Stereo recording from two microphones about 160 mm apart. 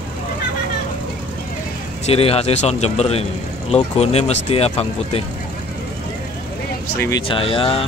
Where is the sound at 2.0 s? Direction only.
40° left (ahead or behind).